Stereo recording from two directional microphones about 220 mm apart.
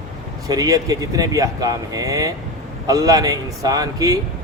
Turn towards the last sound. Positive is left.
turn(degrees=-15)  # may be behind; listen again after turning